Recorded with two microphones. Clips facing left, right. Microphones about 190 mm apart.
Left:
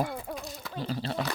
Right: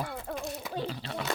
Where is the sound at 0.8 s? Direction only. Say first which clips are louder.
Left 3 dB; 40° left (ahead or behind).